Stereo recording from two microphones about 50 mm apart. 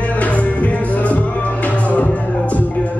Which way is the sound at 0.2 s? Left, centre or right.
Left.